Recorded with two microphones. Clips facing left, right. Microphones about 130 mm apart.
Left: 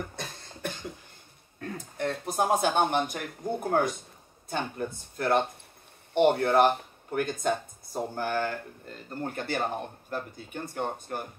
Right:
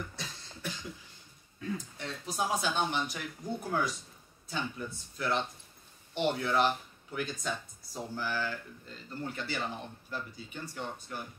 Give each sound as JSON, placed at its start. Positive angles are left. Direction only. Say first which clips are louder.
{"t": 0.0, "sound": "cough", "louder": "left 5 dB", "side_deg": 55}
{"t": 1.6, "sound": "speech", "louder": "left 5 dB", "side_deg": 55}